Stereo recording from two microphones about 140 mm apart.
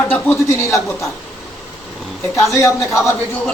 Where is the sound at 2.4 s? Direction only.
20° left (ahead or behind).